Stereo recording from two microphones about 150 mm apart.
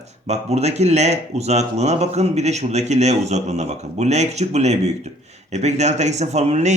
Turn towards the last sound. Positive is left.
turn(degrees=-50)  # may be behind; listen again after turning